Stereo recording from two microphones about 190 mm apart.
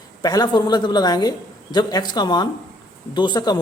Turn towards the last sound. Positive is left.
turn(degrees=20)  # may be behind; listen again after turning